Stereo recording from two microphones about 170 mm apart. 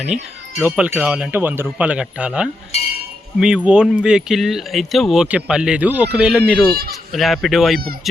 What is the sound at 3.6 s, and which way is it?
Speech, 5° right (ahead or behind).